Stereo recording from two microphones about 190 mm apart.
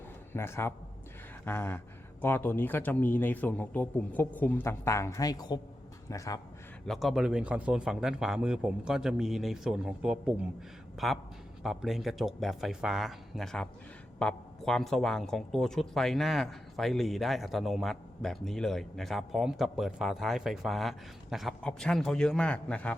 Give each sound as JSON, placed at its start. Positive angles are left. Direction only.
{"t": 0.3, "sound": "speech", "side_deg": 15}
{"t": 6.8, "sound": "speech", "side_deg": 0}